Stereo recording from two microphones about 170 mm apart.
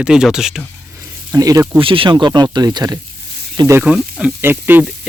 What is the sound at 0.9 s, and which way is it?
Snake, 20° right (ahead or behind).